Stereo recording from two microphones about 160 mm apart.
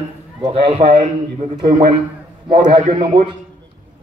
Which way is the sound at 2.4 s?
30° right (ahead or behind).